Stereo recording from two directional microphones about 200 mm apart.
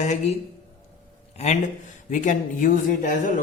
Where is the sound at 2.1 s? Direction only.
40° left (ahead or behind).